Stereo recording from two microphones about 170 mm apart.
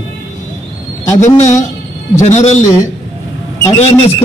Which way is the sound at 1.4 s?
45° left (ahead or behind).